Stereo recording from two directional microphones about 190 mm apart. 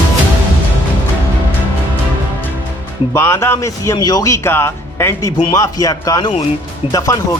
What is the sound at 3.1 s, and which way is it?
Speech, 15° left (ahead or behind).